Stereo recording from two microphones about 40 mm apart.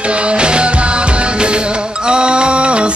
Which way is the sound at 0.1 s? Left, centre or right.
Right.